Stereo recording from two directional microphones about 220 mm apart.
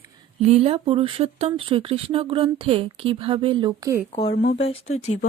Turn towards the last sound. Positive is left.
turn(degrees=30)  # may be behind; listen again after turning